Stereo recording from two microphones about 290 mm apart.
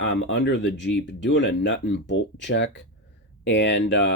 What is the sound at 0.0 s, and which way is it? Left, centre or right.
Speech, left.